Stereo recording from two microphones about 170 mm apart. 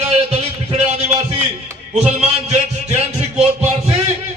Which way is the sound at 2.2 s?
40° right (ahead or behind).